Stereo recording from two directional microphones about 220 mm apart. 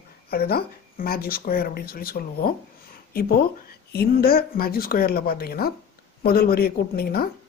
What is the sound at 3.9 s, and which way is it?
Speech, 45° left (ahead or behind).